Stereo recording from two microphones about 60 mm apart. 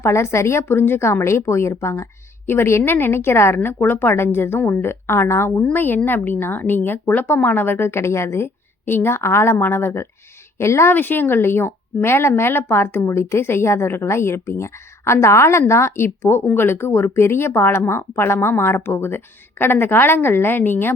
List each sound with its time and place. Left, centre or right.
0.0 s speech: left
5.7 s speech: left
8.9 s speech: left
10.9 s speech: left